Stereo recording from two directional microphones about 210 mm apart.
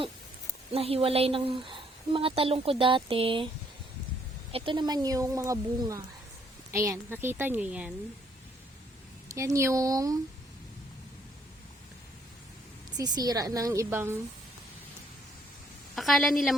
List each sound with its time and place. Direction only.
0.7 s a woman's voice: 30° right (ahead or behind)
4.5 s speech: 25° right (ahead or behind); by 7.9 s 5° right (ahead or behind)
9.3 s speech: 15° right (ahead or behind)
13.0 s speech: 20° right (ahead or behind)
16.0 s a woman's voice: centre (ahead or behind)